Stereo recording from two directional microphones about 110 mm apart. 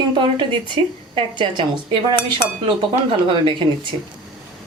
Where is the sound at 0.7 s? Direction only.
45° right (ahead or behind).